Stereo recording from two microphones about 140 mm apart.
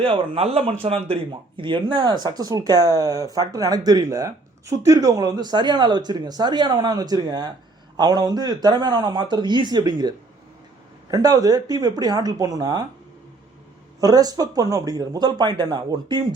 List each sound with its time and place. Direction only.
0.0 s speech: 45° right (ahead or behind); by 12.8 s 30° right (ahead or behind)
14.0 s speech: 25° right (ahead or behind)